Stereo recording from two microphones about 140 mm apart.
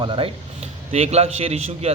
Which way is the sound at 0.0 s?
40° right (ahead or behind).